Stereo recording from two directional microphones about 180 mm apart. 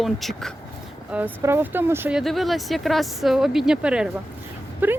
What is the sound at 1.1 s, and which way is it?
Speech, 10° right (ahead or behind).